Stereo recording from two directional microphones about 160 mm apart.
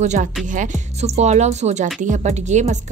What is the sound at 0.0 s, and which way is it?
A woman's voice, 45° right (ahead or behind).